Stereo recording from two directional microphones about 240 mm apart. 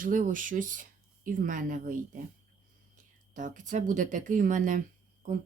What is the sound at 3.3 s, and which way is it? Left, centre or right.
Speech, right.